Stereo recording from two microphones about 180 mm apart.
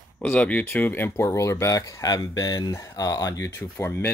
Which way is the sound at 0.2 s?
5° left (ahead or behind).